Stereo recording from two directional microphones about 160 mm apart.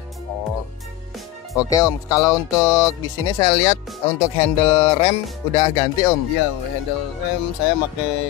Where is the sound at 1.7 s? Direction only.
20° left (ahead or behind).